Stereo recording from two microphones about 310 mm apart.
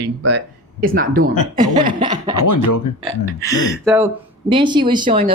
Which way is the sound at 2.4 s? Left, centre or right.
Left.